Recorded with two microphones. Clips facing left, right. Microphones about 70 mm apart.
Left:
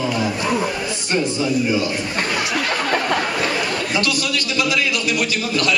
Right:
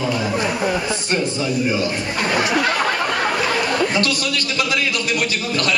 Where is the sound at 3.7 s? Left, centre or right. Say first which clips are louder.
Right 2 dB; right.